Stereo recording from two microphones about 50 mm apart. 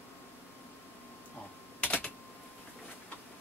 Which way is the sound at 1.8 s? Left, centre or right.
Left.